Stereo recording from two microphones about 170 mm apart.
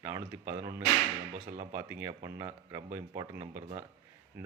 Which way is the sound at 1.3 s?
45° right (ahead or behind).